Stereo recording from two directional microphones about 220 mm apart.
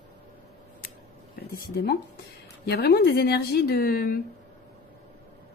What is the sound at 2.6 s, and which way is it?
Speech, 45° left (ahead or behind).